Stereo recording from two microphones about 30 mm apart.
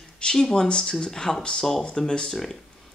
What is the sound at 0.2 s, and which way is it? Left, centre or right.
Speech, left.